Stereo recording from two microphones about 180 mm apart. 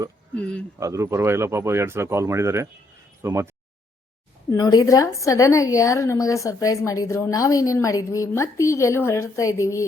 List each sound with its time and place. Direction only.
0.8 s speech: 15° right (ahead or behind)
4.4 s a woman's voice: 20° left (ahead or behind)